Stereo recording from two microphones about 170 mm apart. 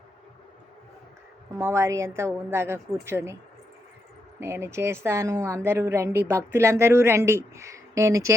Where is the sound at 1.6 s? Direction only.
15° right (ahead or behind).